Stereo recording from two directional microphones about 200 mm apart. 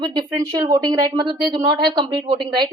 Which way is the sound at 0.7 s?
20° right (ahead or behind).